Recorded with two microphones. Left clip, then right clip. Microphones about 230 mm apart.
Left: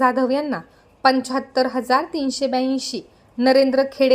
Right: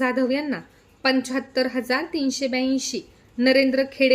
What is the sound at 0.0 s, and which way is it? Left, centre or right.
A woman's voice, centre.